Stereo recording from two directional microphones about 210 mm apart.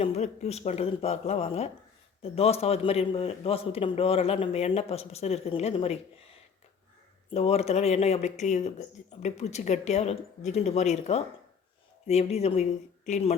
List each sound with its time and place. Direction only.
0.0 s a man's voice: 30° left (ahead or behind)
7.3 s a man's voice: 30° left (ahead or behind)